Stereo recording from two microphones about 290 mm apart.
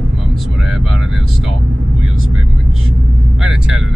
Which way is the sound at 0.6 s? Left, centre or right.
Centre.